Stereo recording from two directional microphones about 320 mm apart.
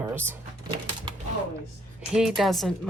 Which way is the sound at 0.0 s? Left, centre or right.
Centre.